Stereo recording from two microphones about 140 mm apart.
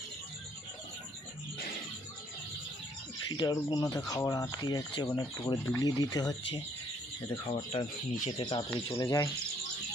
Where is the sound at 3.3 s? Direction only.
30° left (ahead or behind).